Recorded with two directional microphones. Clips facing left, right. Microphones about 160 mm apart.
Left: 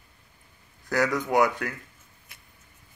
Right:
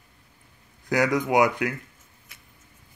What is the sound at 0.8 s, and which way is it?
Speech, 15° right (ahead or behind).